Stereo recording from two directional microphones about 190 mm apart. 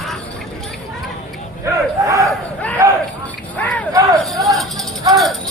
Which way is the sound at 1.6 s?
15° right (ahead or behind).